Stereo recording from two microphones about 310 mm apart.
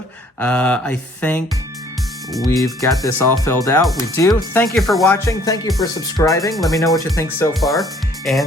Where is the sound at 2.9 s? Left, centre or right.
Centre.